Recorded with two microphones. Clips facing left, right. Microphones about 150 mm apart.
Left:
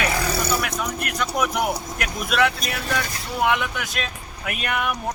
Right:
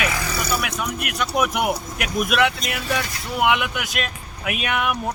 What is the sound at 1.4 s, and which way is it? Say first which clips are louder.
Speech: right 2 dB; 5° right (ahead or behind).